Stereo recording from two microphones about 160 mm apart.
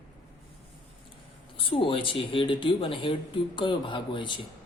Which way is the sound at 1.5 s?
35° left (ahead or behind).